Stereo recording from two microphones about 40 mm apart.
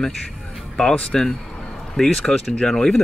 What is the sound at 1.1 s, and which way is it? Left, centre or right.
Speech, centre.